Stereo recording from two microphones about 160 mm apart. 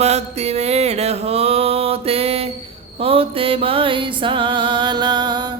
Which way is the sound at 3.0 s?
35° right (ahead or behind).